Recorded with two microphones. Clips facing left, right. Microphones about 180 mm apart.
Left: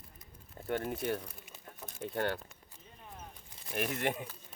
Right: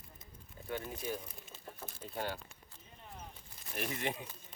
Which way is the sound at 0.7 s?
60° left (ahead or behind).